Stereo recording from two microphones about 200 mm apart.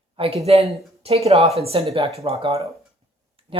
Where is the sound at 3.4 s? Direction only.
30° right (ahead or behind).